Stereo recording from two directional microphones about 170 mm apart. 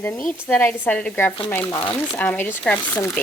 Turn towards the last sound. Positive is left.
turn(degrees=10)  # may be behind; listen again after turning